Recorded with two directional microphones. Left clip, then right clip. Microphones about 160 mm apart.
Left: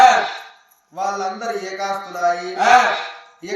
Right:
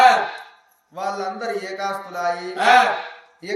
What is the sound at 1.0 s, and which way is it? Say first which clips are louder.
A man's voice: left 3 dB; 10° right (ahead or behind).